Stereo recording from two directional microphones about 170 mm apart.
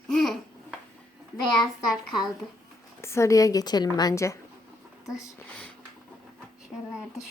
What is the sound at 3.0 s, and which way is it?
A woman's voice, 15° left (ahead or behind).